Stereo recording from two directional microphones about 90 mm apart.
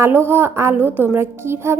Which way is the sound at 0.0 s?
25° right (ahead or behind).